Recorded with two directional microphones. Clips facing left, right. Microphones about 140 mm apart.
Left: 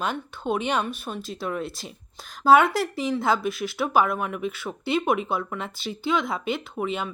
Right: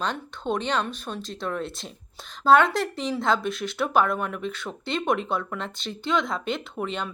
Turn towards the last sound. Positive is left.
turn(degrees=5)  # may be behind; listen again after turning